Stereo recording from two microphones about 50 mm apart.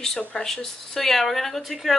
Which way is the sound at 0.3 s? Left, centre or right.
Centre.